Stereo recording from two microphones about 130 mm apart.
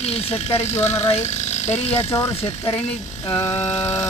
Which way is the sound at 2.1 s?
20° left (ahead or behind).